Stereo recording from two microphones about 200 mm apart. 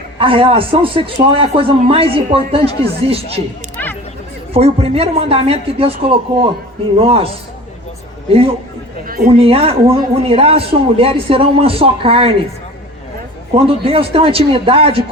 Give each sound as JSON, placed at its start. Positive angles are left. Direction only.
{"t": 0.2, "sound": "a man's voice", "side_deg": -25}
{"t": 4.5, "sound": "a man's voice", "side_deg": -30}
{"t": 8.3, "sound": "a man's voice", "side_deg": -30}
{"t": 9.0, "sound": "a man's voice", "side_deg": -45}
{"t": 9.4, "sound": "a man's voice", "side_deg": -30}
{"t": 13.5, "sound": "a man's voice", "side_deg": -30}